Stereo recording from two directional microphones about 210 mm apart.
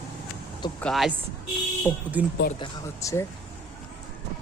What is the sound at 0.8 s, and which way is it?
Speech, centre (ahead or behind).